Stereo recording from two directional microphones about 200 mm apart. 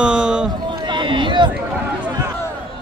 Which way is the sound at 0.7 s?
25° right (ahead or behind).